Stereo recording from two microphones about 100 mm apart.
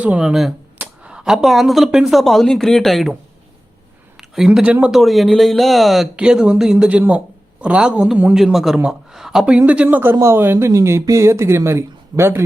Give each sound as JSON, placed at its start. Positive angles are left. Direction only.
{"t": 0.0, "sound": "a man's voice", "side_deg": -10}
{"t": 4.2, "sound": "speech", "side_deg": -5}
{"t": 4.9, "sound": "a man's voice", "side_deg": 0}